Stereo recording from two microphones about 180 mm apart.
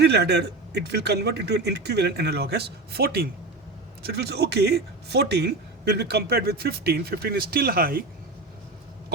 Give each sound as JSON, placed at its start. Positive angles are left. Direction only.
{"t": 0.0, "sound": "speech", "side_deg": -65}